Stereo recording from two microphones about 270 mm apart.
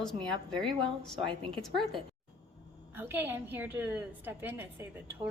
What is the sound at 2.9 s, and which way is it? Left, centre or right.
A woman's voice, centre.